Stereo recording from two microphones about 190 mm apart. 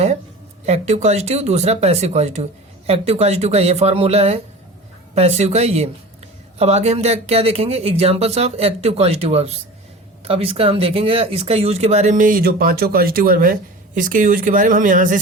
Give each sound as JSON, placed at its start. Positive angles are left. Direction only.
{"t": 0.6, "sound": "speech", "side_deg": -35}